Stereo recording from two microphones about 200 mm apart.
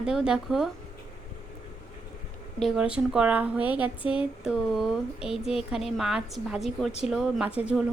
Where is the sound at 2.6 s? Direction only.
5° right (ahead or behind).